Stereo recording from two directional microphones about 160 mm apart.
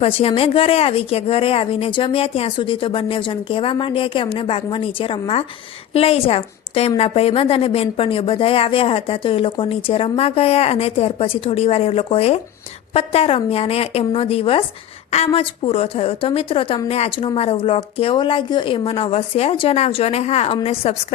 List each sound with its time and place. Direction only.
0.0 s a woman's voice: 35° left (ahead or behind)